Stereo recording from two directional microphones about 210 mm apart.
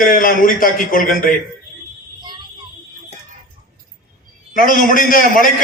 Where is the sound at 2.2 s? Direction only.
20° right (ahead or behind).